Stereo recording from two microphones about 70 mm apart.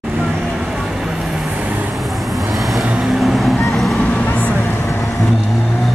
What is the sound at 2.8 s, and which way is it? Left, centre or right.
Vehicle, centre.